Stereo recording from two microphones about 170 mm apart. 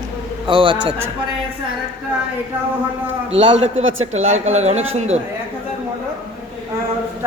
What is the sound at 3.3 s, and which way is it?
A man's voice, 35° right (ahead or behind).